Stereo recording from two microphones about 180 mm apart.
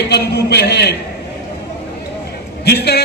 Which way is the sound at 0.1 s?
65° left (ahead or behind).